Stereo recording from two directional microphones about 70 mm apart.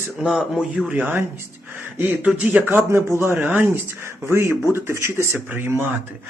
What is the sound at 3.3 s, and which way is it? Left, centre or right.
Speech, centre.